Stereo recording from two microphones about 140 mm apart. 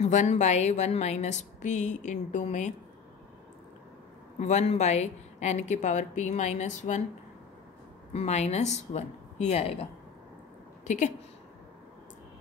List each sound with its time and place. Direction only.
0.1 s speech: 55° left (ahead or behind)
4.4 s speech: 55° left (ahead or behind)
8.1 s speech: 50° left (ahead or behind)
10.8 s a woman's voice: 60° left (ahead or behind)